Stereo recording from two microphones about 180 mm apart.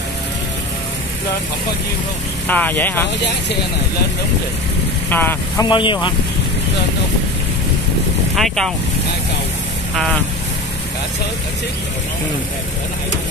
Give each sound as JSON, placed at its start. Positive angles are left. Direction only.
{"t": 2.4, "sound": "speech", "side_deg": 10}
{"t": 5.1, "sound": "speech", "side_deg": 10}
{"t": 5.7, "sound": "speech", "side_deg": 25}
{"t": 8.4, "sound": "speech", "side_deg": 0}